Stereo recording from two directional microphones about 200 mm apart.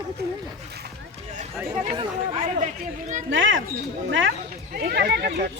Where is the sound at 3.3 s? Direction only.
70° right (ahead or behind).